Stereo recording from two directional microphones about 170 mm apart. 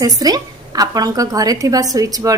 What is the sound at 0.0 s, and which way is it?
A woman's voice, 20° right (ahead or behind).